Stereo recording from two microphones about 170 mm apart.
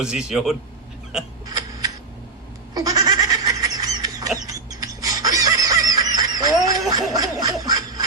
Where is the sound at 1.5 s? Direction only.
20° right (ahead or behind).